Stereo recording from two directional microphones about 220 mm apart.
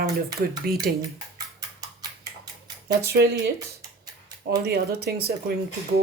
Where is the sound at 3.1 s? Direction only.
45° right (ahead or behind).